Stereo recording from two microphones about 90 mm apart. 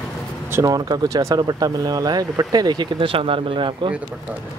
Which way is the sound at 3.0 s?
80° right.